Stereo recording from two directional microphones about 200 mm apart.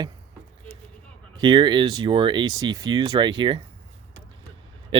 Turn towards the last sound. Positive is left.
turn(degrees=-25)  # may be behind; listen again after turning